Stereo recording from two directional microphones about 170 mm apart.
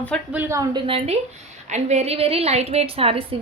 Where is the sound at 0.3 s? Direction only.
15° right (ahead or behind).